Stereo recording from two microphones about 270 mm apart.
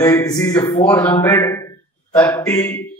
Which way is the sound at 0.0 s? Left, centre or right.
Centre.